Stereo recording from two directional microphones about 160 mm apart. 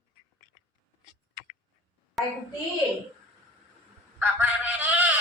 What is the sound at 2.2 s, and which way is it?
Child singing, centre (ahead or behind).